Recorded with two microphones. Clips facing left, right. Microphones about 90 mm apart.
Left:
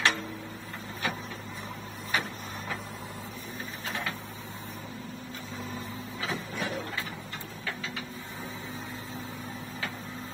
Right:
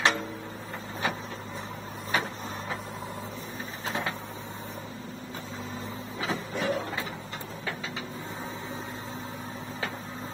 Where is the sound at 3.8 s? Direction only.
25° right (ahead or behind).